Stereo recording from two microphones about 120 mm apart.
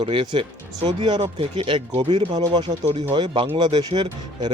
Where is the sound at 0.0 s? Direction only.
45° right (ahead or behind).